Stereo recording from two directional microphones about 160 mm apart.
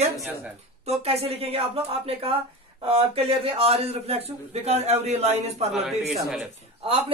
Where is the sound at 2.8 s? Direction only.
35° right (ahead or behind).